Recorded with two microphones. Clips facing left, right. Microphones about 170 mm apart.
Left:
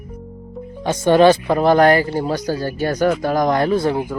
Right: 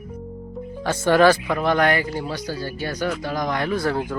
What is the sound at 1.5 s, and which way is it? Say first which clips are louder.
Speech: left 7 dB; 35° left (ahead or behind).